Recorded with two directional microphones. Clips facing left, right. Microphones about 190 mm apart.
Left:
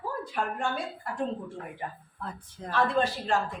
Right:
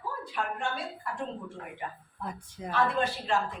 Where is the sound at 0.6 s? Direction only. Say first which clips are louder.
Left 2 dB; 45° left (ahead or behind).